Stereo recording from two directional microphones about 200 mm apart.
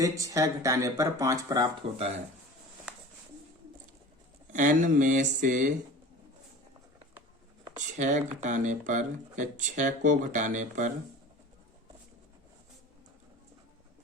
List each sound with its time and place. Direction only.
0.0 s speech: 15° right (ahead or behind)
4.5 s speech: 40° right (ahead or behind)
7.8 s speech: 35° right (ahead or behind)